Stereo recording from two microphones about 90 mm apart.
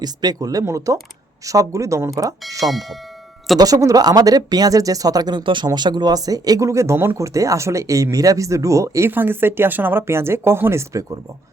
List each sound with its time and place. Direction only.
0.0 s speech: 50° right (ahead or behind)
2.6 s speech: centre (ahead or behind)
3.6 s speech: 40° right (ahead or behind)
5.4 s speech: 65° right (ahead or behind)
5.6 s speech: 55° right (ahead or behind); by 11.2 s 35° right (ahead or behind)